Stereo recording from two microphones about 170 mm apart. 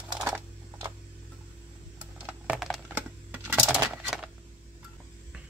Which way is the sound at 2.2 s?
5° right (ahead or behind).